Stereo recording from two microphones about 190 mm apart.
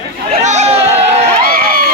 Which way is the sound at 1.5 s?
50° right (ahead or behind).